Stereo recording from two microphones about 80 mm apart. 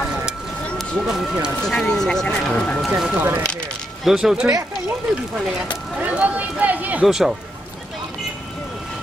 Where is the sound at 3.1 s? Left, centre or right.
Right.